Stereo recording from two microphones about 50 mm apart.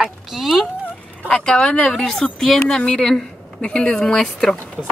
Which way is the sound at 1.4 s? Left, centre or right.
Centre.